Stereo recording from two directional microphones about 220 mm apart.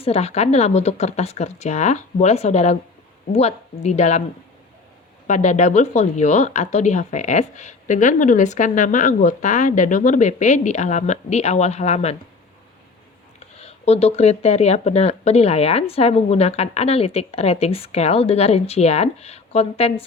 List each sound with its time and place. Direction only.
0.0 s a woman's voice: 30° left (ahead or behind)
5.3 s a woman's voice: 35° left (ahead or behind)
13.6 s speech: 30° left (ahead or behind)